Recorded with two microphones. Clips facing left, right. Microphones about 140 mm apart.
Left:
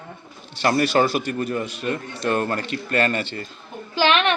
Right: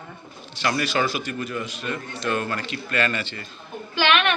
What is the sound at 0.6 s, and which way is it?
A man's voice, 55° left (ahead or behind).